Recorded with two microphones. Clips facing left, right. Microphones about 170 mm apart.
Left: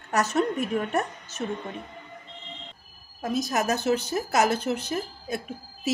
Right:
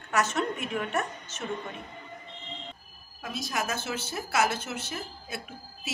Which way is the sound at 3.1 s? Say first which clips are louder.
Left 7 dB; 45° left (ahead or behind).